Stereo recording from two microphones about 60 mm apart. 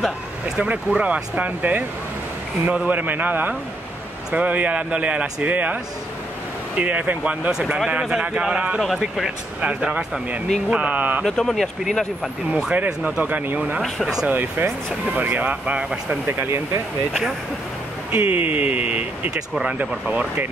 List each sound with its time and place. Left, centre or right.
0.6 s a man's voice: right
2.6 s speech: centre
2.9 s a man's voice: right
6.8 s a man's voice: right
7.5 s speech: centre
8.8 s speech: centre
9.6 s a man's voice: centre
11.2 s speech: centre
12.7 s a man's voice: right
13.8 s speech: centre
14.2 s a man's voice: right
18.1 s a man's voice: right